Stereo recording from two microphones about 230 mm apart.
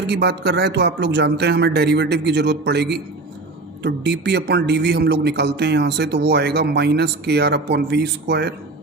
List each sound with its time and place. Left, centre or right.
0.1 s a man's voice: right